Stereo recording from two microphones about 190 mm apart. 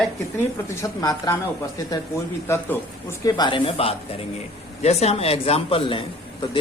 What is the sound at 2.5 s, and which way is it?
A man's voice, 15° left (ahead or behind).